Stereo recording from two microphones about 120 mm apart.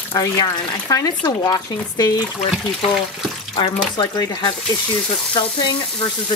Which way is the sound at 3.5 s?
40° left (ahead or behind).